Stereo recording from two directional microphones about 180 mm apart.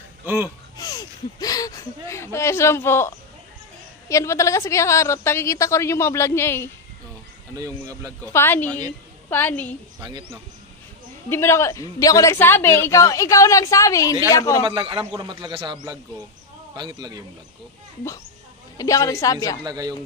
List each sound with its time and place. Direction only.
0.2 s speech: 10° right (ahead or behind)
0.7 s a sound: 20° left (ahead or behind)
4.1 s a woman's voice: 15° left (ahead or behind)
7.5 s speech: 15° right (ahead or behind)
8.3 s a woman's voice: 15° left (ahead or behind)
9.9 s speech: 25° right (ahead or behind)
11.2 s a woman's voice: 15° left (ahead or behind)
14.6 s a man's voice: 25° right (ahead or behind)
18.8 s a woman's voice: 20° left (ahead or behind)
19.6 s a man's voice: 20° right (ahead or behind)